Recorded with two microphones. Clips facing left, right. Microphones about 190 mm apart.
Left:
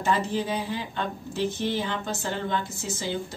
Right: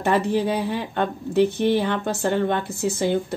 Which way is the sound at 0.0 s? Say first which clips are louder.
Right 6 dB; 60° right (ahead or behind).